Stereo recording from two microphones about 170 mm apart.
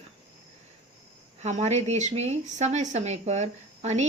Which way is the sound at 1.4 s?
45° right (ahead or behind).